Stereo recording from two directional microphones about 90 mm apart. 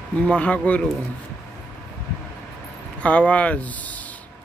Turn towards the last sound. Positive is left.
turn(degrees=15)  # may be behind; listen again after turning